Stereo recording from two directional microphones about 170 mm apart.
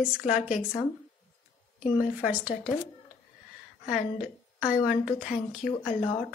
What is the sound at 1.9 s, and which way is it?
Speech, 10° right (ahead or behind).